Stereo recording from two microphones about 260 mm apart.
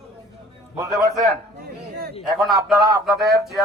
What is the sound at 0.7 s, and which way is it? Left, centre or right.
Speech, centre.